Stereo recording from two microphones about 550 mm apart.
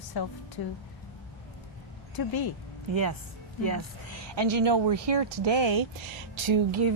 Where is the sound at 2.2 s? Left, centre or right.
Left.